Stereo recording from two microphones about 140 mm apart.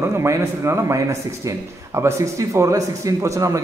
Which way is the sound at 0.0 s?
20° right (ahead or behind).